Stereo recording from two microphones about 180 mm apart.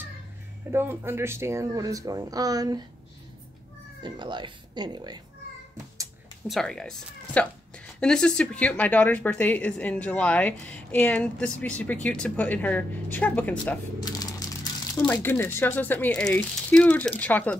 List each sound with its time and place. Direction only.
0.7 s speech: 15° right (ahead or behind)
4.0 s speech: 25° right (ahead or behind)
6.4 s speech: centre (ahead or behind)
15.0 s speech: 10° left (ahead or behind)